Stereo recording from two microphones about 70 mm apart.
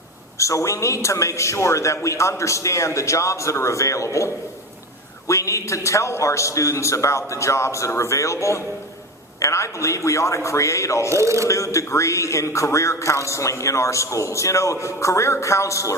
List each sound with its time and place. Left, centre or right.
0.3 s a man's voice: left
5.3 s a man's voice: left
11.1 s speech: right
11.4 s a man's voice: left